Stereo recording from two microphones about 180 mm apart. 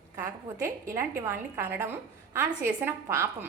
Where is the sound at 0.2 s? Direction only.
15° right (ahead or behind).